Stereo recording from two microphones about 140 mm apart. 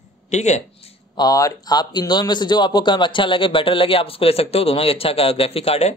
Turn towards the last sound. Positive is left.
turn(degrees=45)  # may be behind; listen again after turning